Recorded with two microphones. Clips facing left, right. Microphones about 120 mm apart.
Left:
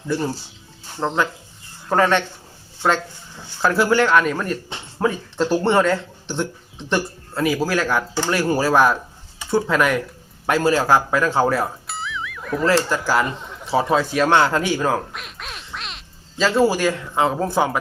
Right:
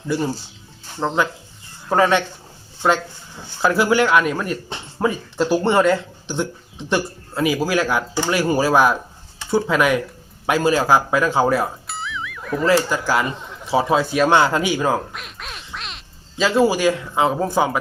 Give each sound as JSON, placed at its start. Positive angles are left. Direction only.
{"t": 0.9, "sound": "speech", "side_deg": -5}
{"t": 3.6, "sound": "speech", "side_deg": -5}